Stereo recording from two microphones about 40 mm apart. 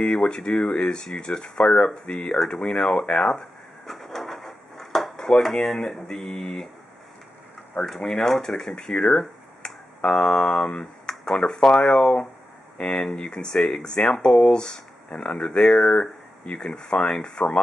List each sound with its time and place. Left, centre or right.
0.0 s speech: left
3.1 s speech: left
3.8 s drawer open or close: centre
8.0 s speech: centre
8.7 s speech: left
10.2 s speech: left
14.0 s speech: left
15.0 s speech: left